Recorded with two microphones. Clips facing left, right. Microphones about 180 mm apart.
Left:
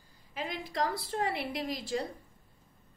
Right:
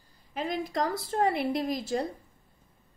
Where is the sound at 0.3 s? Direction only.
40° right (ahead or behind).